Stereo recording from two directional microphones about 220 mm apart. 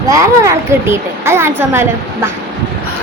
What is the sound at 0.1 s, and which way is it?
Speech, 15° right (ahead or behind).